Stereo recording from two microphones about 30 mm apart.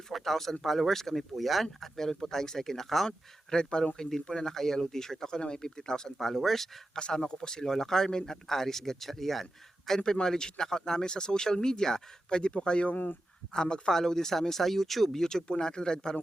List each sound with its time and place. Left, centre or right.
0.1 s a sound: centre
0.6 s speech: centre
3.1 s speech: left
6.1 s speech: centre
6.9 s speech: left
10.0 s speech: left
12.3 s speech: left
13.9 s speech: centre